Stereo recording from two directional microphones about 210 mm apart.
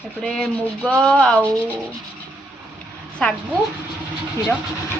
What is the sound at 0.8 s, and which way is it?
Speech, 5° left (ahead or behind).